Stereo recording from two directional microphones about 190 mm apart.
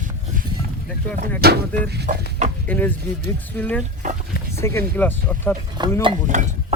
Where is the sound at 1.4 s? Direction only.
55° right (ahead or behind).